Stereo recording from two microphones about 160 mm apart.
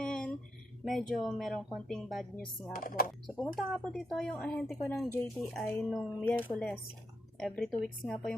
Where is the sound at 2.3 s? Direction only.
60° left (ahead or behind).